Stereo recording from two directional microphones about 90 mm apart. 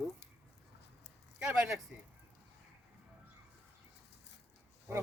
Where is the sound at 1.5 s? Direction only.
5° right (ahead or behind).